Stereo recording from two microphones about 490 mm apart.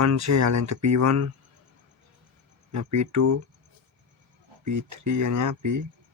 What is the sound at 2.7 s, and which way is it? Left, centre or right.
Speech, right.